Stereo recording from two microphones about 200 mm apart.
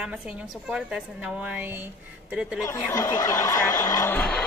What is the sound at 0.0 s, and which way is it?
A woman's voice, 5° right (ahead or behind).